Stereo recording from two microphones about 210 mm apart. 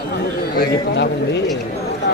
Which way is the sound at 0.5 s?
50° left (ahead or behind).